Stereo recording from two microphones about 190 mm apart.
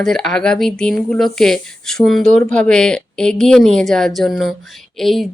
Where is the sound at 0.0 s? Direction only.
5° left (ahead or behind).